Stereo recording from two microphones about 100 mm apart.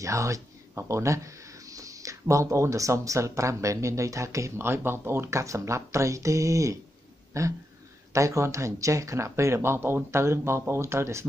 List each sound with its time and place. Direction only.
0.0 s speech: 30° right (ahead or behind)